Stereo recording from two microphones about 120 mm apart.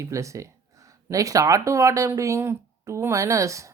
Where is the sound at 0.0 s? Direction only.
25° right (ahead or behind).